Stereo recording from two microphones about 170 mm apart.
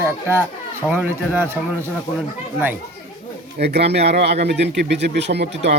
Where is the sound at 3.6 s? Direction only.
75° right (ahead or behind).